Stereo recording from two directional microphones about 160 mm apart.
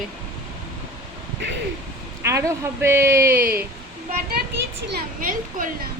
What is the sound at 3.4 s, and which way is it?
Speech, 70° right (ahead or behind).